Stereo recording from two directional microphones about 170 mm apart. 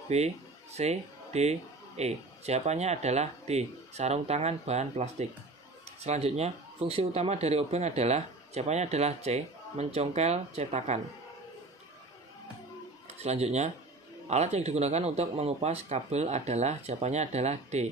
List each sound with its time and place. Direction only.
0.1 s speech: 40° right (ahead or behind)
13.2 s speech: 40° right (ahead or behind)